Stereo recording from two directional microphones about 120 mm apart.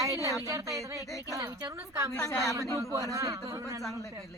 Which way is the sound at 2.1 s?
25° left (ahead or behind).